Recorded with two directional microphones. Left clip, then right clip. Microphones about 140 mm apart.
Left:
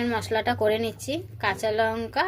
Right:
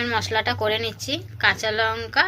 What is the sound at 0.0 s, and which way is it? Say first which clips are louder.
A woman's voice: right 3 dB; 25° left (ahead or behind).